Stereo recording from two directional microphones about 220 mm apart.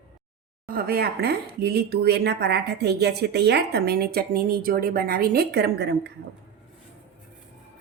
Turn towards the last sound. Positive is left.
turn(degrees=-50)  # may be behind; listen again after turning